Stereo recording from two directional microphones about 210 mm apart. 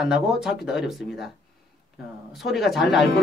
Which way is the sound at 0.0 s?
Centre (ahead or behind).